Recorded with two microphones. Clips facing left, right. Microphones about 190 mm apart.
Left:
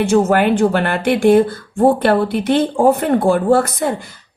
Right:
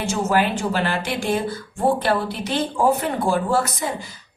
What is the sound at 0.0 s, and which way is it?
Speech, 55° left (ahead or behind).